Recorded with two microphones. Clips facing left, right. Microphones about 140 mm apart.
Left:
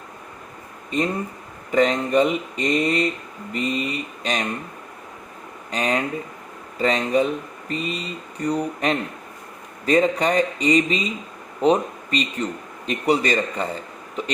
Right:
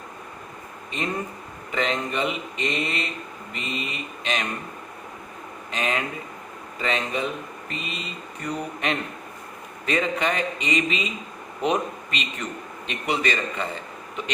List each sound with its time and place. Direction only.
0.9 s speech: 40° left (ahead or behind)
5.7 s speech: 40° left (ahead or behind)